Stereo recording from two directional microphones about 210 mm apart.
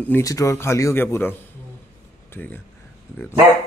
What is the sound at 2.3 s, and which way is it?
Speech, 10° left (ahead or behind).